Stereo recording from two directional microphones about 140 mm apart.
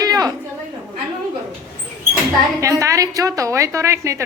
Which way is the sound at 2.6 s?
25° right (ahead or behind).